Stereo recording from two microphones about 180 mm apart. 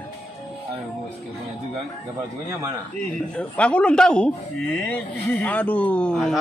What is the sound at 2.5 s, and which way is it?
Speech, 15° right (ahead or behind).